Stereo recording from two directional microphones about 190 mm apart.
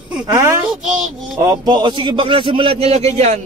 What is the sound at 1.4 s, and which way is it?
A man's voice, 20° right (ahead or behind).